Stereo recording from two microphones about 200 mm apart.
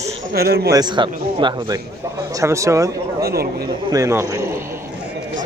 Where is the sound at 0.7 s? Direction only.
20° right (ahead or behind).